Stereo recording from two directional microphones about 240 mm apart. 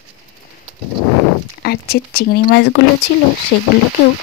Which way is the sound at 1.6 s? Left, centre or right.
Left.